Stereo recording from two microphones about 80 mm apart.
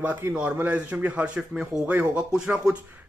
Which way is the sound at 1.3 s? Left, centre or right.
Centre.